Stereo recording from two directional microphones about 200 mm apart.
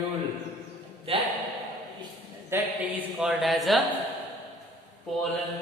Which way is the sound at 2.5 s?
10° right (ahead or behind).